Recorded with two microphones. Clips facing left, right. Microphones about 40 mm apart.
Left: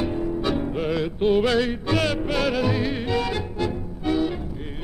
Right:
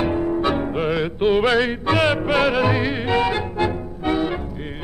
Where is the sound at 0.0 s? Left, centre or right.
Right.